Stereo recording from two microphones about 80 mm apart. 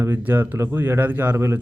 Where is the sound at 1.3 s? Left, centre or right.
Right.